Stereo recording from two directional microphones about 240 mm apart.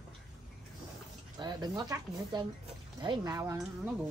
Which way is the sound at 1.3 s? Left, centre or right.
Centre.